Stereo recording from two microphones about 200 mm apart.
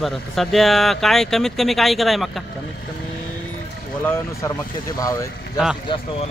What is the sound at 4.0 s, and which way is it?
Speech, 10° left (ahead or behind).